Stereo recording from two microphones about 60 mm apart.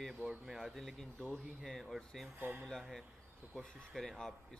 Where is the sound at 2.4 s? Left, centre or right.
Right.